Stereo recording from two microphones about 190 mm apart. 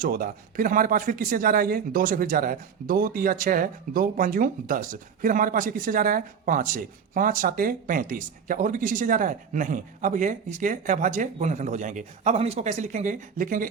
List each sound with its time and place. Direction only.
0.0 s speech: 45° right (ahead or behind)